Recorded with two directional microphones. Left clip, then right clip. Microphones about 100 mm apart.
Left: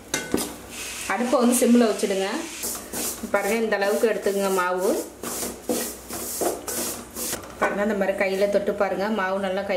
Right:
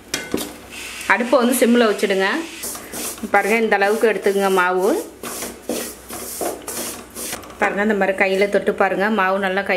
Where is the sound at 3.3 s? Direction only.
40° right (ahead or behind).